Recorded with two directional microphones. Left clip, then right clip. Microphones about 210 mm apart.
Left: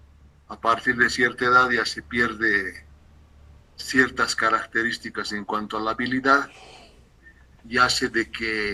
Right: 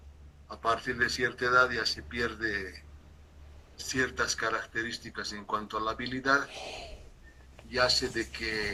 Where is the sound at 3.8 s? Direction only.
45° left (ahead or behind).